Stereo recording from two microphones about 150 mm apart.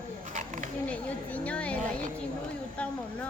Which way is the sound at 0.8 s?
10° left (ahead or behind).